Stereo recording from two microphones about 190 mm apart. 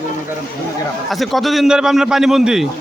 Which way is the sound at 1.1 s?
Centre (ahead or behind).